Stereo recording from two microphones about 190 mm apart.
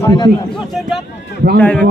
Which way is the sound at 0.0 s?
20° left (ahead or behind).